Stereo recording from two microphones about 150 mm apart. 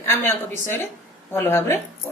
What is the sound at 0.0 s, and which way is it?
A woman's voice, 15° left (ahead or behind).